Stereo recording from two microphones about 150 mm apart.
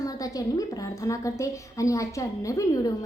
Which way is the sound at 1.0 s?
20° left (ahead or behind).